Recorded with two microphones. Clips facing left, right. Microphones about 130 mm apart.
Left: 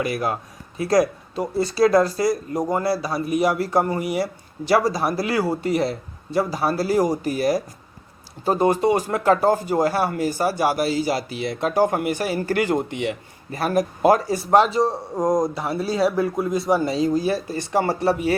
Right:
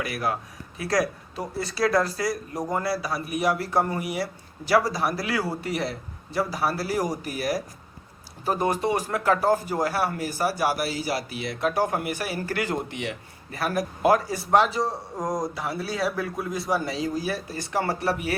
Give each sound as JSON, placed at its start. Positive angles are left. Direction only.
{"t": 0.0, "sound": "a man's voice", "side_deg": 25}